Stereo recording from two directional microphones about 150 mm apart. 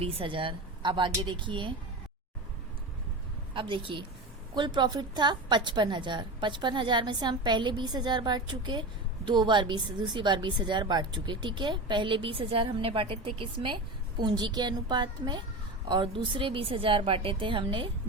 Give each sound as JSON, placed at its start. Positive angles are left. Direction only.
{"t": 0.0, "sound": "a woman's voice", "side_deg": -35}
{"t": 3.5, "sound": "a woman's voice", "side_deg": -35}